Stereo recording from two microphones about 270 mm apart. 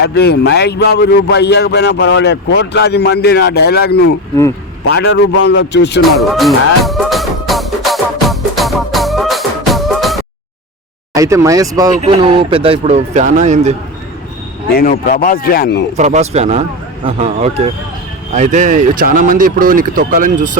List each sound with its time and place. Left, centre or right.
0.0 s a man's voice: left
6.0 s music: centre
11.1 s speech: centre
14.7 s a man's voice: left
16.0 s speech: right